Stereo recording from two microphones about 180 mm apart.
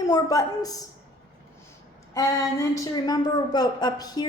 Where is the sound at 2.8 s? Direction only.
20° left (ahead or behind).